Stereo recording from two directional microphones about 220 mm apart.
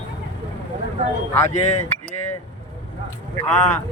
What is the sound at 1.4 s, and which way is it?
Speech, 30° left (ahead or behind).